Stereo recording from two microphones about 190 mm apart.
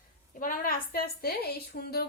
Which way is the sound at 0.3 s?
45° left (ahead or behind).